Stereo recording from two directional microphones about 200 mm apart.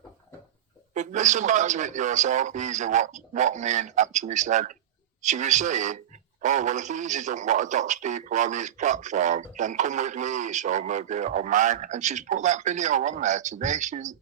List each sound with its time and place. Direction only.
0.9 s a man's voice: 35° right (ahead or behind)